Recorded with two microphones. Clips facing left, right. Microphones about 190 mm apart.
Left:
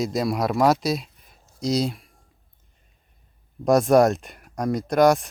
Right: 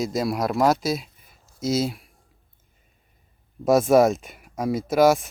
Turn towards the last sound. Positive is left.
turn(degrees=0)  # may be behind; listen again after turning